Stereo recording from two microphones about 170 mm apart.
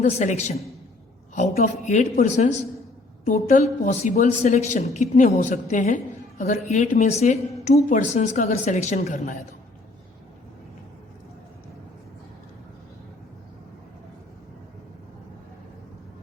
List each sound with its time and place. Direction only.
0.0 s speech: 45° left (ahead or behind)